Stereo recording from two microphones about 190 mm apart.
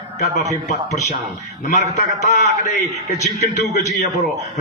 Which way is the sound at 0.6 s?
40° left (ahead or behind).